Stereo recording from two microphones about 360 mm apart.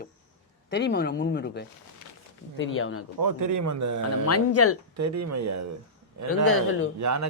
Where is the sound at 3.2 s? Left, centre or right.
Right.